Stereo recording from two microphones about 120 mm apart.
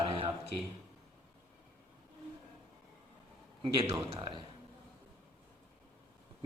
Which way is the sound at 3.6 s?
50° right (ahead or behind).